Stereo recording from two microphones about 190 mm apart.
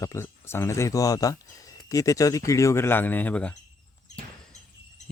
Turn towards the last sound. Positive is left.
turn(degrees=5)  # may be behind; listen again after turning